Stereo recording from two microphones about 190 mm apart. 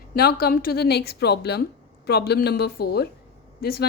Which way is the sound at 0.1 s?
50° left (ahead or behind).